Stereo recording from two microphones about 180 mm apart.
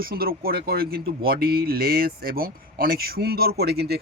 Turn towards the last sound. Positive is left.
turn(degrees=-60)  # may be behind; listen again after turning